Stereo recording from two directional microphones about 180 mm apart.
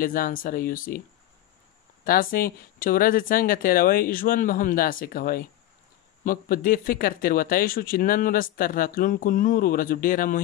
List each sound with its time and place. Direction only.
0.0 s speech: 50° left (ahead or behind)
2.0 s speech: 55° left (ahead or behind)